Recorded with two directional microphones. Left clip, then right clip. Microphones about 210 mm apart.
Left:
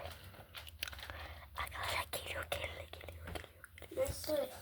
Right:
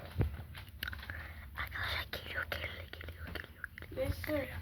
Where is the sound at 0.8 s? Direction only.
5° right (ahead or behind).